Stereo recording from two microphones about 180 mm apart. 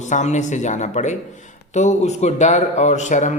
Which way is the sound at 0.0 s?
40° left (ahead or behind).